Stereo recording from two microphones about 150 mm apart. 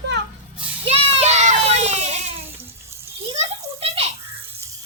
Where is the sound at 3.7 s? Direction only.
40° right (ahead or behind).